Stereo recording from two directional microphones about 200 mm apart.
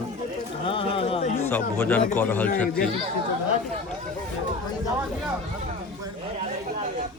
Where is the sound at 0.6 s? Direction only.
25° left (ahead or behind).